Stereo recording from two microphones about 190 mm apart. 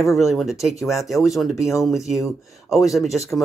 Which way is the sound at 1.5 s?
15° left (ahead or behind).